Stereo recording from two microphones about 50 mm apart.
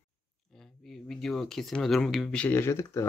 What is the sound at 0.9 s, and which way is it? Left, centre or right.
Speech, centre.